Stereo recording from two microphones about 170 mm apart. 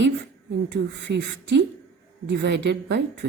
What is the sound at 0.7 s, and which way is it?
A woman's voice, 90° right.